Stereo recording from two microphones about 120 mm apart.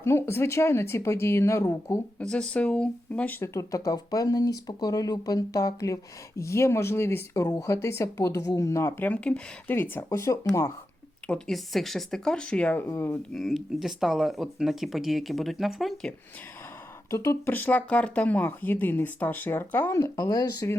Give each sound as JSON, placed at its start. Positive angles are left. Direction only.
{"t": 0.0, "sound": "speech", "side_deg": 20}
{"t": 2.1, "sound": "speech", "side_deg": 10}
{"t": 11.3, "sound": "speech", "side_deg": 5}
{"t": 13.3, "sound": "speech", "side_deg": 0}
{"t": 17.1, "sound": "speech", "side_deg": 25}